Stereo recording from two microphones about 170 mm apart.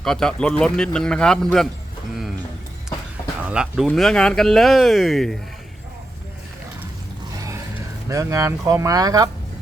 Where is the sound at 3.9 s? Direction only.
5° left (ahead or behind).